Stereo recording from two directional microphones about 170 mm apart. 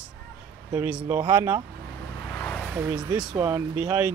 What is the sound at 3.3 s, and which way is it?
Speech, 20° right (ahead or behind).